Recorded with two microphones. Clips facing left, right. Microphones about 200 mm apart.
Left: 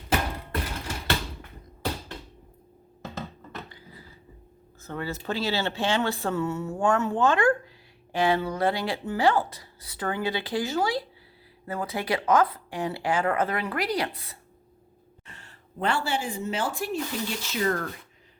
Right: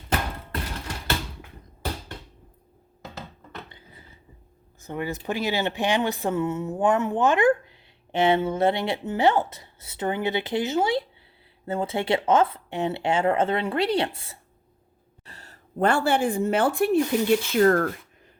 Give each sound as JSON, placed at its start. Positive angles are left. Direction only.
{"t": 3.7, "sound": "a sound", "side_deg": -20}
{"t": 4.8, "sound": "speech", "side_deg": -15}
{"t": 15.3, "sound": "speech", "side_deg": -40}